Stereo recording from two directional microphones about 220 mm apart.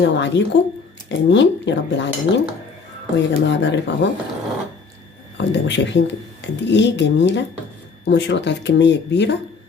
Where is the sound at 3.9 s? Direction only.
55° left (ahead or behind).